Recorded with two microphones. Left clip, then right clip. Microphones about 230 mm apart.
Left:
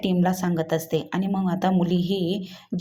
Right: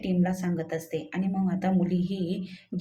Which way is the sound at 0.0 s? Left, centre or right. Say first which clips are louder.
Left 6 dB; left.